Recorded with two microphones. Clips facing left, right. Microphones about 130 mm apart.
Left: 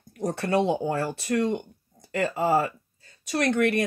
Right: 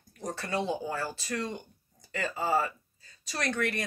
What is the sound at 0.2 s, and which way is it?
Speech, 60° left (ahead or behind).